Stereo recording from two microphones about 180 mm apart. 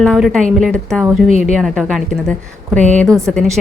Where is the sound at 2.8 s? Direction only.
40° right (ahead or behind).